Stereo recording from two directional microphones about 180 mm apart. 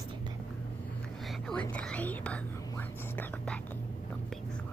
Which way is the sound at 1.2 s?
5° left (ahead or behind).